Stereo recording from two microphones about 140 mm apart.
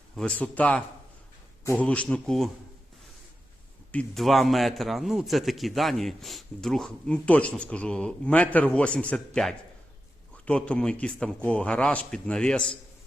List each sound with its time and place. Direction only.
0.2 s a man's voice: 10° left (ahead or behind)
3.9 s a man's voice: centre (ahead or behind)